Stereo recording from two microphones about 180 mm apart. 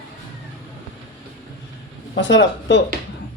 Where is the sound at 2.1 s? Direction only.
90° left.